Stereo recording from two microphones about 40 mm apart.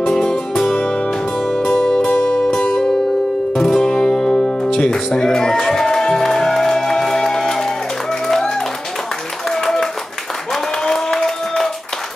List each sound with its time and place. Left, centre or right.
0.1 s music: centre
4.3 s music: left
9.6 s clapping: centre
10.5 s applause: centre